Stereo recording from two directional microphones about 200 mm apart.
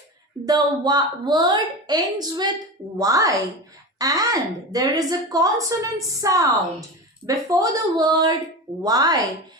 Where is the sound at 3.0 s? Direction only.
15° right (ahead or behind).